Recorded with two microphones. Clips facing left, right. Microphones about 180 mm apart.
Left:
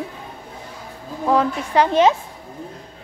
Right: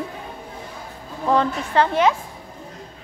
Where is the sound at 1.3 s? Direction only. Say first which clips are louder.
Left 1 dB; 5° left (ahead or behind).